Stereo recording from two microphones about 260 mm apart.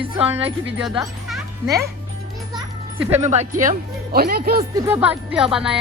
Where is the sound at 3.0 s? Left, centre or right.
Centre.